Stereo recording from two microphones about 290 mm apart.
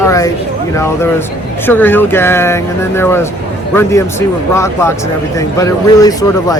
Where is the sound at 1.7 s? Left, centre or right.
Centre.